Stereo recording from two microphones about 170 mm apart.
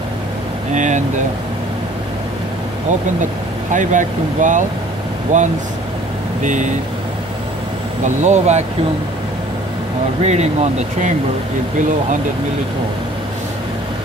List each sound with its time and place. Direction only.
0.7 s speech: 45° right (ahead or behind)
3.7 s speech: 50° right (ahead or behind)
8.0 s speech: 45° right (ahead or behind)
10.2 s speech: 40° right (ahead or behind)